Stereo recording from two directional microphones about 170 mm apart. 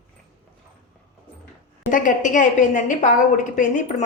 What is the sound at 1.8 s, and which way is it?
A woman's voice, 50° left (ahead or behind).